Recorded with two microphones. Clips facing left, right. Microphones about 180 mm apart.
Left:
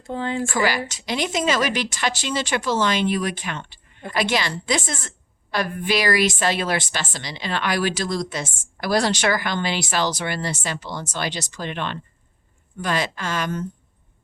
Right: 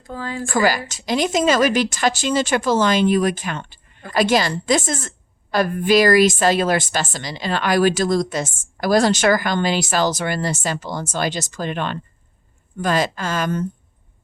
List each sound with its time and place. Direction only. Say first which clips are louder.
0.0 s speech: left 3 dB; 25° left (ahead or behind)
0.4 s a woman's voice: right 8 dB; 45° right (ahead or behind)